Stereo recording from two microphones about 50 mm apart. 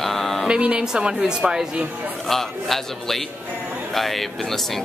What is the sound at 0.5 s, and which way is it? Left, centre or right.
A woman's voice, centre.